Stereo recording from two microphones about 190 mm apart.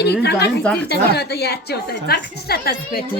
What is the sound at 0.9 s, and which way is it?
A woman's voice, 60° left (ahead or behind).